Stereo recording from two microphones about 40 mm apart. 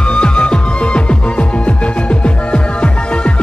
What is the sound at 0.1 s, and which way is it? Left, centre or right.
Music, left.